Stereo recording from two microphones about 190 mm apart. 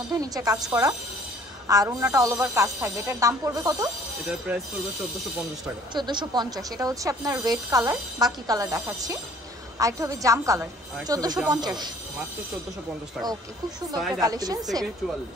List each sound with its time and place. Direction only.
0.1 s speech: 20° right (ahead or behind)
4.5 s speech: 5° right (ahead or behind)
5.9 s speech: 25° right (ahead or behind)
14.2 s speech: 20° right (ahead or behind)